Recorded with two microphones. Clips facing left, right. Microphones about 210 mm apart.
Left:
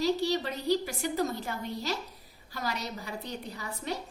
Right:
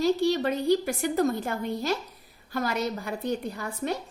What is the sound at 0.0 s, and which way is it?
A woman's voice, 50° right (ahead or behind).